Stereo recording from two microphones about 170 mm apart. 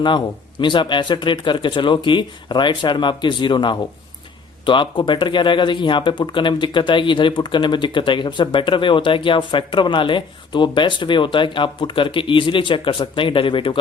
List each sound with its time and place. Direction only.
0.6 s speech: 30° left (ahead or behind)